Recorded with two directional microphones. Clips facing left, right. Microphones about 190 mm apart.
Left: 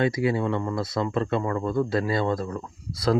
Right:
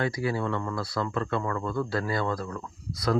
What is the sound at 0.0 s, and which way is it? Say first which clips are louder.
Speech: left 5 dB; 20° left (ahead or behind).